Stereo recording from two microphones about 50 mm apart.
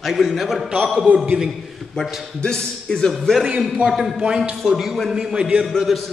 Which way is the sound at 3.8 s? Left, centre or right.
Centre.